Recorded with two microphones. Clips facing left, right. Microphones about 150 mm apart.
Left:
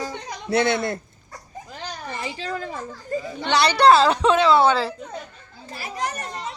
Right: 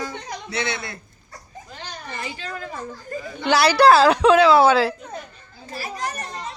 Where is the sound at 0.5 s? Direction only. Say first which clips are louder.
Left 8 dB; 45° left (ahead or behind).